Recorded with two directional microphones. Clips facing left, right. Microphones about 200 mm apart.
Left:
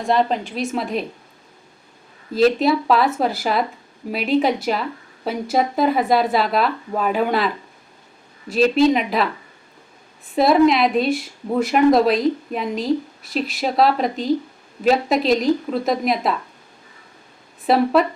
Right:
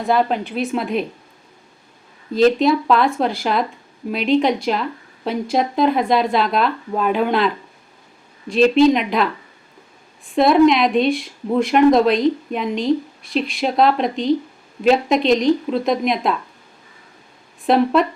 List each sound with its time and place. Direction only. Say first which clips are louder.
0.0 s a woman's voice: right 1 dB; 5° right (ahead or behind)
2.3 s a woman's voice: right 2 dB; 5° left (ahead or behind)
10.3 s a woman's voice: right 2 dB; 5° left (ahead or behind)
17.7 s a woman's voice: right 2 dB; 5° left (ahead or behind)